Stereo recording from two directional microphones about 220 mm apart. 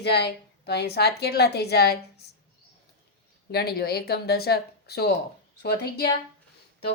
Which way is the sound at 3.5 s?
45° left (ahead or behind).